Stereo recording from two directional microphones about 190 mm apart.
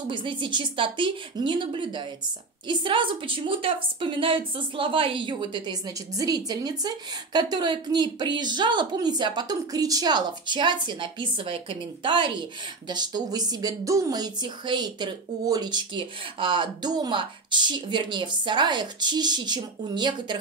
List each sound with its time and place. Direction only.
0.1 s a woman's voice: 25° right (ahead or behind)